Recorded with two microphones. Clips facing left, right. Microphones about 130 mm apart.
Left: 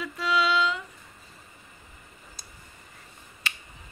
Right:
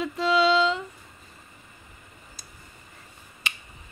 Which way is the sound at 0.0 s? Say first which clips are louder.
Right 4 dB; 25° right (ahead or behind).